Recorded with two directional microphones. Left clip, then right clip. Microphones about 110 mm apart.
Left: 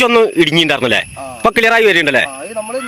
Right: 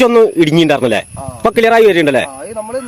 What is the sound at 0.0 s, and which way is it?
A man's voice, 15° right (ahead or behind).